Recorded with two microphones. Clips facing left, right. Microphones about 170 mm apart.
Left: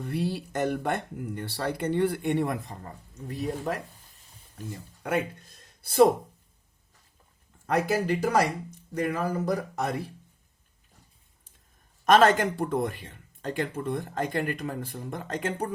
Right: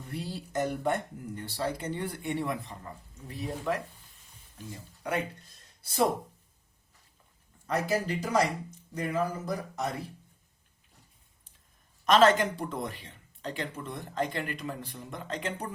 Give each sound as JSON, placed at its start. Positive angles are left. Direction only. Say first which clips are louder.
{"t": 0.0, "sound": "speech", "louder": "left 8 dB", "side_deg": 65}
{"t": 5.8, "sound": "speech", "louder": "left 8 dB", "side_deg": 60}
{"t": 7.7, "sound": "speech", "louder": "left 4 dB", "side_deg": 60}
{"t": 12.0, "sound": "speech", "louder": "left 2 dB", "side_deg": 50}